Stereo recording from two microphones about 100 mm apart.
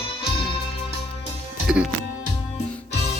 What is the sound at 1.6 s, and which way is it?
Music, 10° right (ahead or behind).